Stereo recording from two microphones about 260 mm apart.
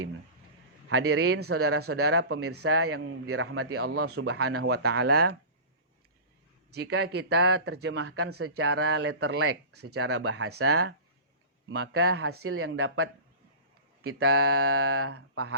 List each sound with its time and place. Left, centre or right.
0.9 s speech: right
4.7 s speech: right
6.7 s speech: right